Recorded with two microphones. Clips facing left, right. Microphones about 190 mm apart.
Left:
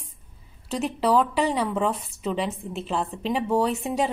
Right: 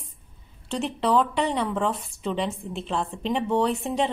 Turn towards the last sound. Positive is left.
turn(degrees=5)  # may be behind; listen again after turning